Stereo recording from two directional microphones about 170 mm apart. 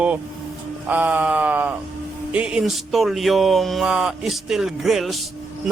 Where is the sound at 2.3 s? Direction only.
10° right (ahead or behind).